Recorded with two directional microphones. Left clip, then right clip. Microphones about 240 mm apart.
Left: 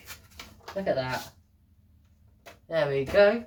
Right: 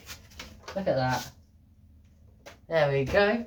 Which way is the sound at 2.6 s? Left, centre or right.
Centre.